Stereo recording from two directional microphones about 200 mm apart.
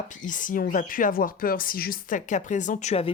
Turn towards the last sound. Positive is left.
turn(degrees=35)  # may be behind; listen again after turning